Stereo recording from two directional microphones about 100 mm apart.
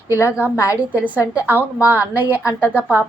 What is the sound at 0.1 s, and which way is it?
Speech, 30° left (ahead or behind).